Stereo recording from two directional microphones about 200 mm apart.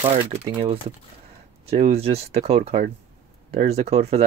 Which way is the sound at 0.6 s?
30° right (ahead or behind).